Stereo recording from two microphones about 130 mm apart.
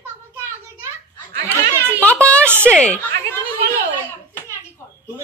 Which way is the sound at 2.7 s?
10° left (ahead or behind).